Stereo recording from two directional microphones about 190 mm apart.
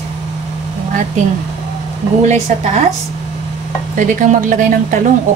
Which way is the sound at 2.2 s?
40° right (ahead or behind).